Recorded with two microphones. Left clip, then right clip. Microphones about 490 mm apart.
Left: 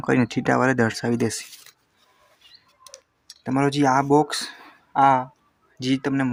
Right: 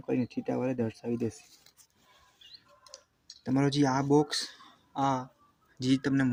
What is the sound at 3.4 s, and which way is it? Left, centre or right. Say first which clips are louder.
Speech: left 8 dB; right.